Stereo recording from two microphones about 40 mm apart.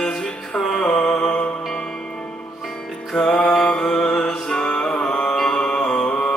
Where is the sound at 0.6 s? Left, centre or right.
Centre.